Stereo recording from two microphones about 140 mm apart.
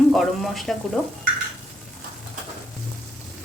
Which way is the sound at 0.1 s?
Centre (ahead or behind).